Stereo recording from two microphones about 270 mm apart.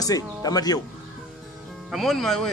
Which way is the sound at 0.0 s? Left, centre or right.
Centre.